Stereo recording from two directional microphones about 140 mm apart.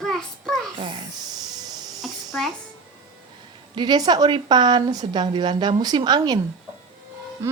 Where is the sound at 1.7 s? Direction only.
30° right (ahead or behind).